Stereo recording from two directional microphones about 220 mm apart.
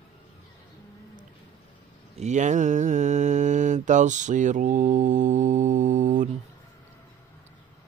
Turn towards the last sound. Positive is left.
turn(degrees=-35)  # may be behind; listen again after turning